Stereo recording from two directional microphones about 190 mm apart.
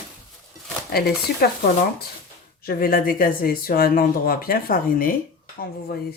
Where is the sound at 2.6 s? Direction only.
50° left (ahead or behind).